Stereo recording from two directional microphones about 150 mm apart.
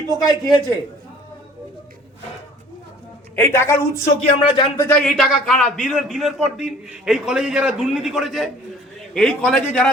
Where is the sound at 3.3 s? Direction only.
15° left (ahead or behind).